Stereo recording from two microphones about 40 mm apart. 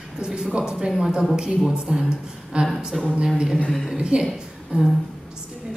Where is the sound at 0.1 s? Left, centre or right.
Centre.